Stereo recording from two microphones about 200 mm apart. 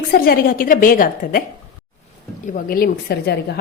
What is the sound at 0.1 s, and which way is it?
A woman's voice, 45° left (ahead or behind).